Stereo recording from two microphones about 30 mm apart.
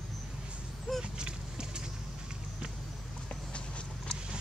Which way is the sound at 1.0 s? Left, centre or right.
Right.